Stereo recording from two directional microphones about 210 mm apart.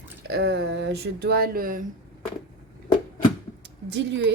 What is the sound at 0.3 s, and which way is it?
Speech, 50° right (ahead or behind).